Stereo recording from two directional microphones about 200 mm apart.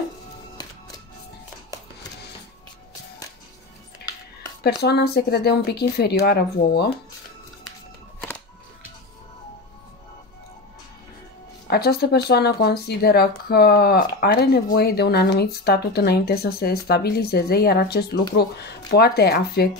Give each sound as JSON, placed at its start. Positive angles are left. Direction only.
{"t": 0.6, "sound": "music", "side_deg": 20}
{"t": 4.8, "sound": "speech", "side_deg": 55}
{"t": 11.6, "sound": "speech", "side_deg": 55}